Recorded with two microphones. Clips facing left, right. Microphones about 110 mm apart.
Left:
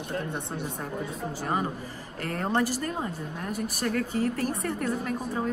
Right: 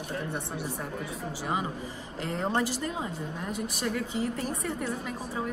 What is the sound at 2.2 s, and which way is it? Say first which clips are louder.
A woman's voice: left 2 dB; 15° right (ahead or behind).